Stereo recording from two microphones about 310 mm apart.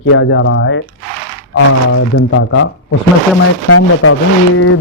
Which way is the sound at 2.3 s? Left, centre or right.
Left.